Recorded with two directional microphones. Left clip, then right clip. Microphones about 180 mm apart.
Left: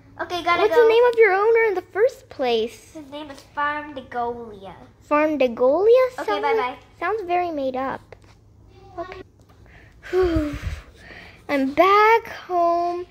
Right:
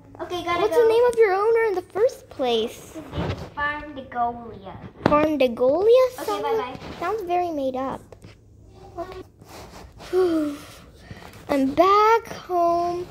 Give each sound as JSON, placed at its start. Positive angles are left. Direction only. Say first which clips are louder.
{"t": 0.3, "sound": "a woman's voice", "louder": "left 3 dB", "side_deg": 25}
{"t": 0.8, "sound": "a child's voice", "louder": "left 1 dB", "side_deg": 5}
{"t": 3.5, "sound": "a woman's voice", "louder": "left 4 dB", "side_deg": 25}
{"t": 5.1, "sound": "a child's voice", "louder": "left 1 dB", "side_deg": 10}
{"t": 6.3, "sound": "a woman's voice", "louder": "left 3 dB", "side_deg": 20}
{"t": 7.0, "sound": "a child's voice", "louder": "left 1 dB", "side_deg": 0}
{"t": 10.1, "sound": "speech", "louder": "even", "side_deg": 5}